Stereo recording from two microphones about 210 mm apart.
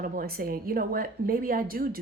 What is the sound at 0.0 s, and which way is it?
Speech, 45° right (ahead or behind).